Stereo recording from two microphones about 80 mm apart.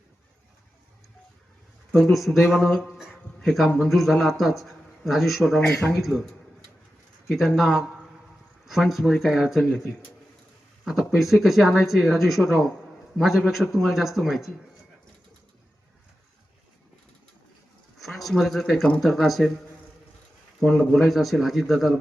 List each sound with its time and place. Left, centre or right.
2.0 s a man's voice: centre
2.9 s music: centre
3.8 s a man's voice: centre
7.3 s a man's voice: centre
11.0 s a man's voice: centre
18.0 s a man's voice: centre
20.6 s a man's voice: centre